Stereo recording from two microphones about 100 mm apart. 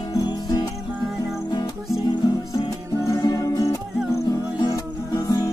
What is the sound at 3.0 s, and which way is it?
Music, 35° left (ahead or behind).